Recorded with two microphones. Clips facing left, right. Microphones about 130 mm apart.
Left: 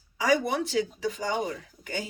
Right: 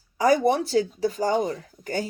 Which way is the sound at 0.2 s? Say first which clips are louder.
Right 5 dB; 40° right (ahead or behind).